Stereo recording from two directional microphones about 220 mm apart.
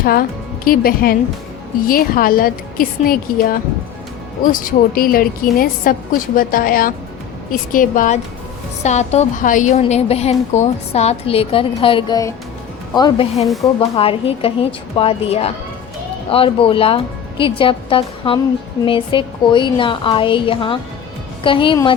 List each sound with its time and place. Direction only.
0.0 s a woman's voice: 40° left (ahead or behind); by 13.4 s 20° left (ahead or behind)
13.4 s speech: centre (ahead or behind)
13.7 s speech: 25° left (ahead or behind)